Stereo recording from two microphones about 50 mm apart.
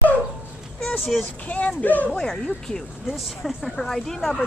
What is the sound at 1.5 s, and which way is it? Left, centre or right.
Speech, left.